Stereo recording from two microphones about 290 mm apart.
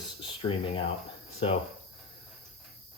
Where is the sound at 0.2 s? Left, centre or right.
Centre.